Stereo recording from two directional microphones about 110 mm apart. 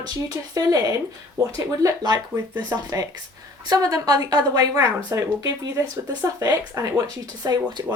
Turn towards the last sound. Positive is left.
turn(degrees=-35)  # may be behind; listen again after turning